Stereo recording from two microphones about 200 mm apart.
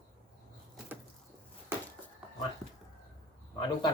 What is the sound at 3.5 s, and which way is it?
Speech, 20° left (ahead or behind).